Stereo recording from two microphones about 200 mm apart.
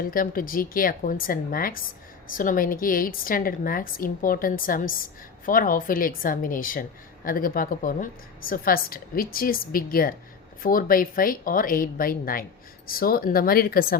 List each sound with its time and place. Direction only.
0.0 s a woman's voice: 45° left (ahead or behind)